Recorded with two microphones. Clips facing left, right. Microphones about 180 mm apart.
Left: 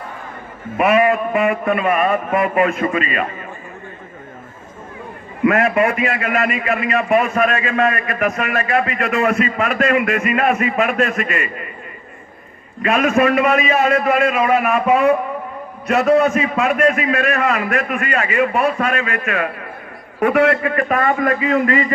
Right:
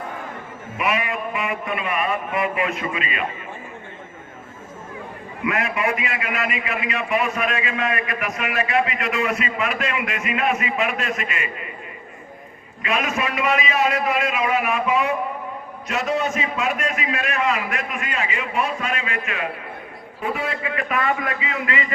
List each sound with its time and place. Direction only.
0.8 s a man's voice: 50° left (ahead or behind)
5.4 s a man's voice: 50° left (ahead or behind)
12.8 s a man's voice: 50° left (ahead or behind)
20.1 s a man's voice: 70° left (ahead or behind); by 21.9 s 45° left (ahead or behind)